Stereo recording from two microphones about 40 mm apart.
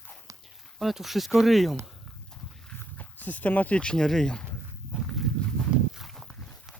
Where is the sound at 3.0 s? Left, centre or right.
Left.